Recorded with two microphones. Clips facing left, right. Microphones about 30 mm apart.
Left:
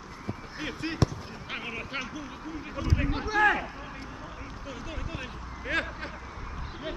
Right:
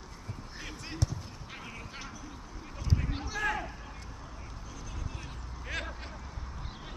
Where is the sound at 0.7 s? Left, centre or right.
Left.